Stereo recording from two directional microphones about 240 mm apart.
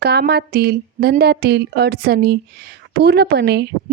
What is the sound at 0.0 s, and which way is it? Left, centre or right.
Speech, right.